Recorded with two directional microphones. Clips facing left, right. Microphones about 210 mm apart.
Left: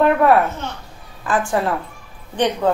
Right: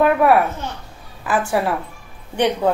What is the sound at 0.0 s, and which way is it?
Babbling, 10° right (ahead or behind).